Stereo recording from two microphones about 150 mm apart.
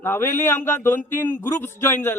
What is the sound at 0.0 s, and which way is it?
A man's voice, 15° left (ahead or behind).